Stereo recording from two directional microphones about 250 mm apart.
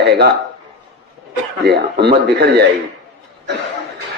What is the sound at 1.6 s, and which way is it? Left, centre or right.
A man's voice, right.